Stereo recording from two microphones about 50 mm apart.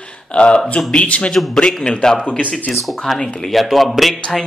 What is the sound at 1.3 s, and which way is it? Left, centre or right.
A man's voice, centre.